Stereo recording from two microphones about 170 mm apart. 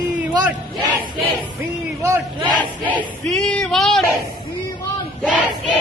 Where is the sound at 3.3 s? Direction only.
5° left (ahead or behind).